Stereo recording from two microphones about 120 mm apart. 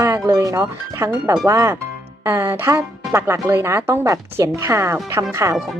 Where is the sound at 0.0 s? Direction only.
30° right (ahead or behind).